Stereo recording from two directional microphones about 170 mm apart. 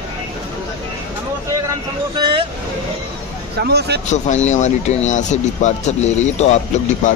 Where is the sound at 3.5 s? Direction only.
75° right (ahead or behind).